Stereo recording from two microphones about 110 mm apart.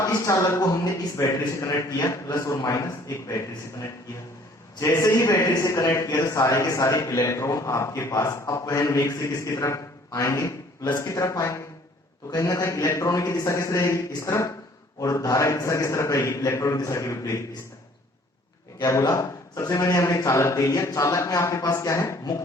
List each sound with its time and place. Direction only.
0.0 s a man's voice: 30° left (ahead or behind)
18.8 s a man's voice: 30° left (ahead or behind)